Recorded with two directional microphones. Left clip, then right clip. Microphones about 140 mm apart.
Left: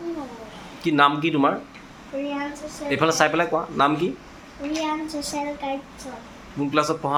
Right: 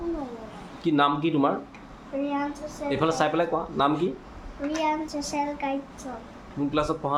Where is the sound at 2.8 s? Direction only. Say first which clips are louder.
Left 4 dB; 10° left (ahead or behind).